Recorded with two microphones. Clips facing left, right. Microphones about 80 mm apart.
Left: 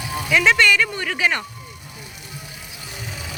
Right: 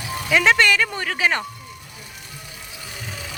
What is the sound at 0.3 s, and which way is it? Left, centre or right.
Speech, right.